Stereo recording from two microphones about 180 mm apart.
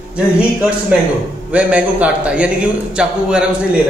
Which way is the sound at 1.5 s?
5° right (ahead or behind).